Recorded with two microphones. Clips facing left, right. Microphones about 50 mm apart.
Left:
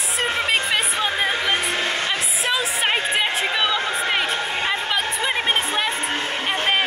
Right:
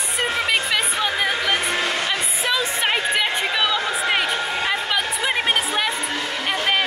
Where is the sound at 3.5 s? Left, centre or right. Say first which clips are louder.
Even; left.